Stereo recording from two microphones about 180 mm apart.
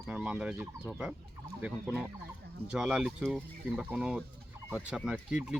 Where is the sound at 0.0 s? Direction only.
5° right (ahead or behind).